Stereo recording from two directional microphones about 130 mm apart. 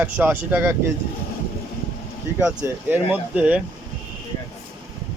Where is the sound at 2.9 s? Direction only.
15° right (ahead or behind).